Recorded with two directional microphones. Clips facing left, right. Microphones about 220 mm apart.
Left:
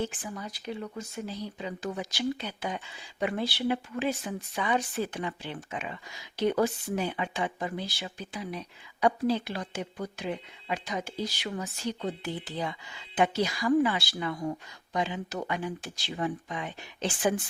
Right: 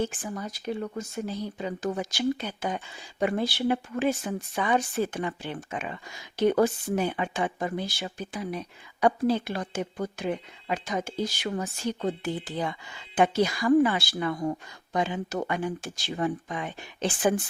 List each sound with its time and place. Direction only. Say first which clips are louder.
0.0 s speech: right 3 dB; 45° right (ahead or behind)